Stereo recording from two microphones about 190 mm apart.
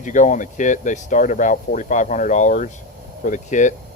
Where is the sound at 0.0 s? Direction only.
40° left (ahead or behind).